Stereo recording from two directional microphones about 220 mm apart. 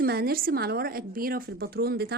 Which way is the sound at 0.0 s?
45° right (ahead or behind).